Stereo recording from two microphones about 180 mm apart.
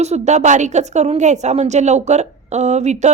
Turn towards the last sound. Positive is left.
turn(degrees=-40)  # may be behind; listen again after turning